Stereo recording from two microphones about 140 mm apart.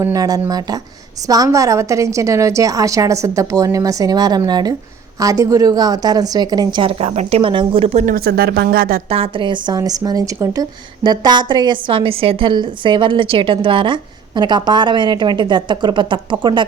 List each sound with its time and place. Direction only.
0.0 s a woman's voice: 25° right (ahead or behind)
7.0 s speech: 45° right (ahead or behind)
8.0 s a woman's voice: 90° right
9.0 s speech: 45° right (ahead or behind)